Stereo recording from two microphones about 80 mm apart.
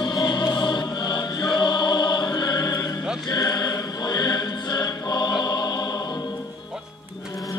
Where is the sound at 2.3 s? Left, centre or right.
Left.